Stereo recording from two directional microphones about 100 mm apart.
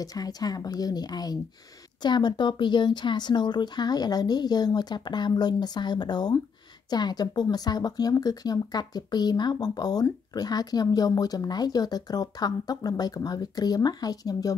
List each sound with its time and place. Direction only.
0.0 s speech: 40° left (ahead or behind)